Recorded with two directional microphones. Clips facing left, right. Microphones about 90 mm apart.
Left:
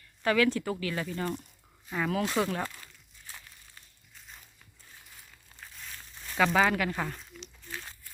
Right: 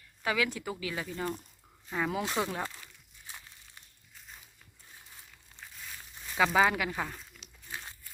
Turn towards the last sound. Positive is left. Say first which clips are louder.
# left 2 dB
turn(degrees=0)  # may be behind; listen again after turning